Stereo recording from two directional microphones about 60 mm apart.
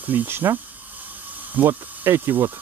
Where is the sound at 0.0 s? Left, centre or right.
Right.